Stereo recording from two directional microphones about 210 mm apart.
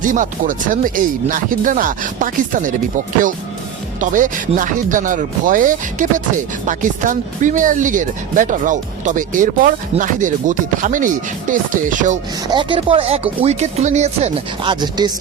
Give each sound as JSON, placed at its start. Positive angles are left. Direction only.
{"t": 0.0, "sound": "speech", "side_deg": -40}
{"t": 4.0, "sound": "speech", "side_deg": -40}
{"t": 12.5, "sound": "speech", "side_deg": -25}